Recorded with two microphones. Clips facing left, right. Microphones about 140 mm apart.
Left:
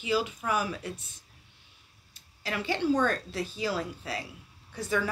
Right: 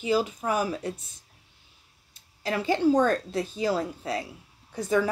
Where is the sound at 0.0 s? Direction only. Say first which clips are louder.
Right 4 dB; 40° right (ahead or behind).